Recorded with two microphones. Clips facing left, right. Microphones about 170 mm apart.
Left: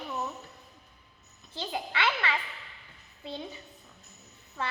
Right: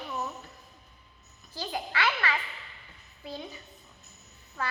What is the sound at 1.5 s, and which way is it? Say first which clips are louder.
A woman's voice: right 1 dB; 20° left (ahead or behind).